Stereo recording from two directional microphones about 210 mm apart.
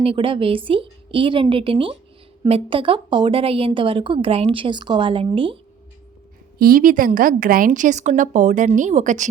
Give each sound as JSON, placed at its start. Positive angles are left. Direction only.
{"t": 0.0, "sound": "a woman's voice", "side_deg": -25}
{"t": 6.6, "sound": "a woman's voice", "side_deg": -45}